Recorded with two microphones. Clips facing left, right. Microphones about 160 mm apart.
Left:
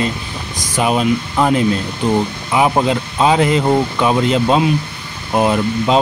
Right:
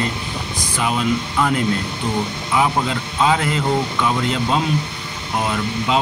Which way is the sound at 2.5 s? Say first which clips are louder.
Left 5 dB; 20° left (ahead or behind).